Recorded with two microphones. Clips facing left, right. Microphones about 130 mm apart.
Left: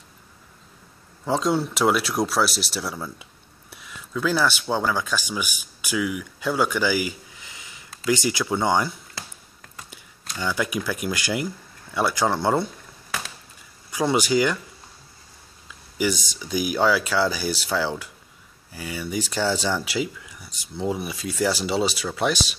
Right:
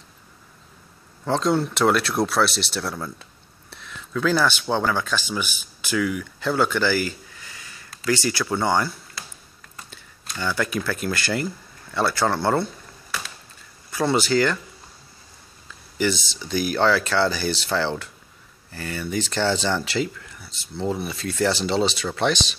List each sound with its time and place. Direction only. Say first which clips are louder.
1.2 s speech: right 1 dB; 5° left (ahead or behind)
13.9 s speech: even; 15° left (ahead or behind)
16.3 s speech: right 1 dB; 10° left (ahead or behind)